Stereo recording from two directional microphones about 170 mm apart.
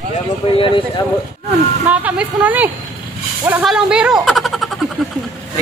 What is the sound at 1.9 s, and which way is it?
A man's voice, 10° right (ahead or behind).